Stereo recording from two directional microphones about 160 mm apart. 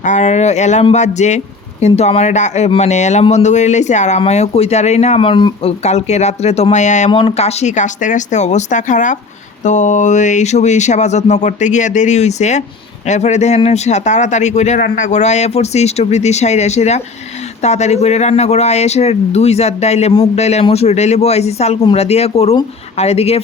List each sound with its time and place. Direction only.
0.0 s speech: 50° left (ahead or behind); by 5.7 s 30° left (ahead or behind)
5.8 s speech: 45° left (ahead or behind)
7.1 s speech: 35° left (ahead or behind)